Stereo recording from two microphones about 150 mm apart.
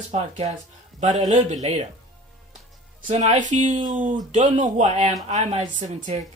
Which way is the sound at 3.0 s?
55° right (ahead or behind).